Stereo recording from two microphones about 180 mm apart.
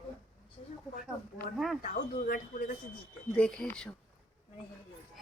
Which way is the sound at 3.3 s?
5° left (ahead or behind).